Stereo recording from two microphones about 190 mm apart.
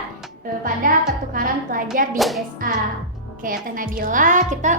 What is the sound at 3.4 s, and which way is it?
A woman's voice, 45° right (ahead or behind).